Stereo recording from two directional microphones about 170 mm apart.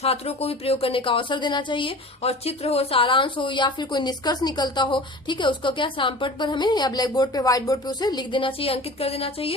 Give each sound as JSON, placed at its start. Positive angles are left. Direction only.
{"t": 0.0, "sound": "a woman's voice", "side_deg": 35}